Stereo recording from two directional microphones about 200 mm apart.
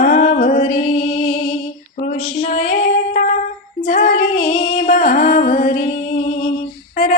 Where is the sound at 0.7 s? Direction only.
25° left (ahead or behind).